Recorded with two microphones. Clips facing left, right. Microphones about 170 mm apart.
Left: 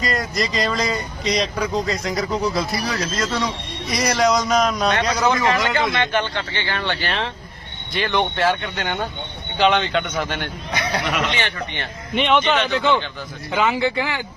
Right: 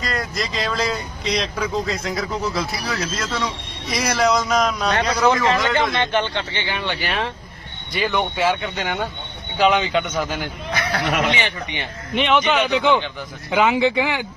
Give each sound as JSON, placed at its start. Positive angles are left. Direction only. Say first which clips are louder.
{"t": 0.0, "sound": "speech", "louder": "left 3 dB", "side_deg": 0}
{"t": 5.9, "sound": "a man's voice", "louder": "right 1 dB", "side_deg": -25}
{"t": 11.0, "sound": "speech", "louder": "right 5 dB", "side_deg": -50}
{"t": 11.3, "sound": "a man's voice", "louder": "even", "side_deg": -15}
{"t": 12.1, "sound": "a man's voice", "louder": "even", "side_deg": 0}